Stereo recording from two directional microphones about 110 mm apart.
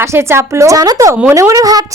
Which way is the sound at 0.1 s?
25° right (ahead or behind).